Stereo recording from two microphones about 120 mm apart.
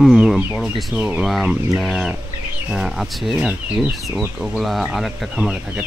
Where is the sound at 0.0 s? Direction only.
5° right (ahead or behind).